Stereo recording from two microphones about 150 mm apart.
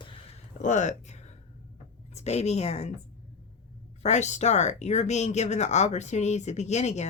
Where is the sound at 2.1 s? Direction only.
45° left (ahead or behind).